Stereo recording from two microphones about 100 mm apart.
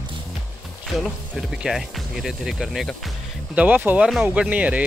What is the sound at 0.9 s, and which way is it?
Speech, centre (ahead or behind).